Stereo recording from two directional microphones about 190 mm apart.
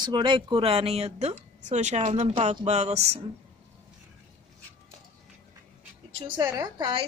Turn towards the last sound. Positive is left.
turn(degrees=-25)  # may be behind; listen again after turning